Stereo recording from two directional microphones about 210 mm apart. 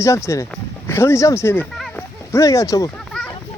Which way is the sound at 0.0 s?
15° left (ahead or behind).